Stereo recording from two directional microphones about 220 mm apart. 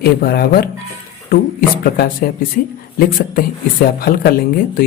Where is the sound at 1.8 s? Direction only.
40° left (ahead or behind).